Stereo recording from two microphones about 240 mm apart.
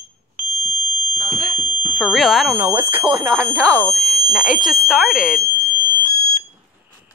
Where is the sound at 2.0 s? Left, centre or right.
Centre.